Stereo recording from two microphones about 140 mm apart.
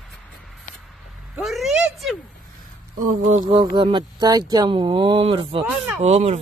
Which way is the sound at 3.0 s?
75° right (ahead or behind).